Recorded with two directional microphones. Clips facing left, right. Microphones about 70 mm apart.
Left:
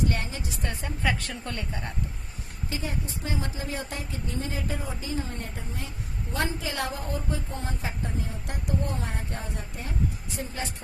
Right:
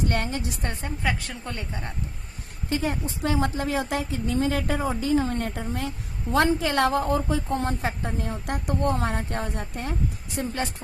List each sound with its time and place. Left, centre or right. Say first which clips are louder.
0.0 s a woman's voice: right 3 dB; right
1.0 s speech: even; centre
1.5 s speech: even; right
2.6 s speech: right 7 dB; right
6.3 s a woman's voice: right 9 dB; right